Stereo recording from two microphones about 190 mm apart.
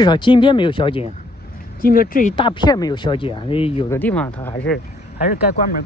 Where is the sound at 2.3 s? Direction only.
25° left (ahead or behind).